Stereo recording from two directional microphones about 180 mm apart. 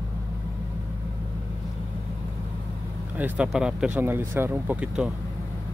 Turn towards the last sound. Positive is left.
turn(degrees=-5)  # may be behind; listen again after turning